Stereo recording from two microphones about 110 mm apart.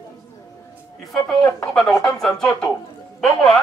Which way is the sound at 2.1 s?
5° left (ahead or behind).